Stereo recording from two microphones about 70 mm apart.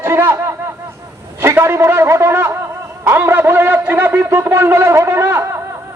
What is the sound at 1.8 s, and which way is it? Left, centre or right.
Speech, right.